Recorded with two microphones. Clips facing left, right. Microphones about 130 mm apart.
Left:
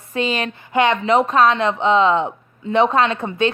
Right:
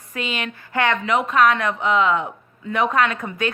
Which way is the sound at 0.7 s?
20° left (ahead or behind).